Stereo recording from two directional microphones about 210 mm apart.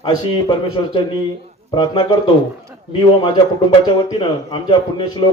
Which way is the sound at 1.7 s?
20° left (ahead or behind).